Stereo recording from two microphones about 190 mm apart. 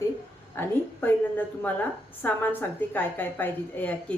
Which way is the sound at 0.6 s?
10° left (ahead or behind).